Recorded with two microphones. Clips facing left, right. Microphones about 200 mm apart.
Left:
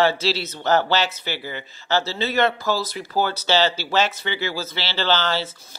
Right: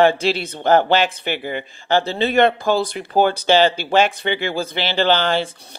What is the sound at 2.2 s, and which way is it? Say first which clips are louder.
Speech: right 6 dB; 55° right (ahead or behind).